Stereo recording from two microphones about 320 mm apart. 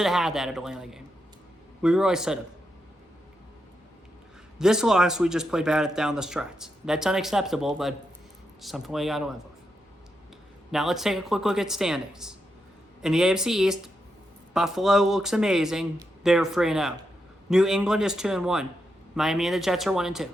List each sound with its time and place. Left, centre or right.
0.0 s speech: centre
4.5 s speech: centre
10.7 s speech: centre